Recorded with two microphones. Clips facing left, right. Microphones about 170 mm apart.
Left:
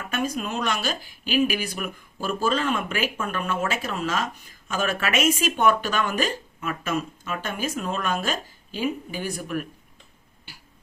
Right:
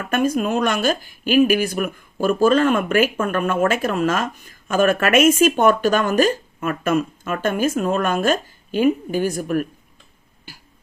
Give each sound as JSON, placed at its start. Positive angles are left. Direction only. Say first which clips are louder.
{"t": 0.1, "sound": "speech", "louder": "right 9 dB", "side_deg": -50}